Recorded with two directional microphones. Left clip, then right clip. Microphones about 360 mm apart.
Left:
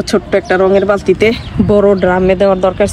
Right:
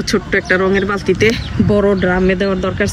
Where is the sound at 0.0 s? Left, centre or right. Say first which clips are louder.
Left 3 dB; centre.